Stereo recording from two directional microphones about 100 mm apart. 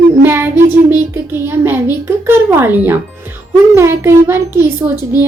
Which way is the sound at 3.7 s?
25° right (ahead or behind).